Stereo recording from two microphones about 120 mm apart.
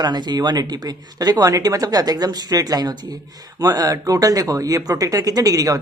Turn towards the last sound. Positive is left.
turn(degrees=-30)  # may be behind; listen again after turning